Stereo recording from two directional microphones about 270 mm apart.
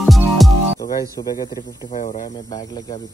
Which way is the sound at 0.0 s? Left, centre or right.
Centre.